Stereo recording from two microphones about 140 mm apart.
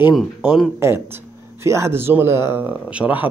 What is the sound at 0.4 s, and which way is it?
Speech, 10° right (ahead or behind).